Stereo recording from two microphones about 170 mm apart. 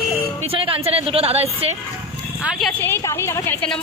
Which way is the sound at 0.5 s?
35° right (ahead or behind).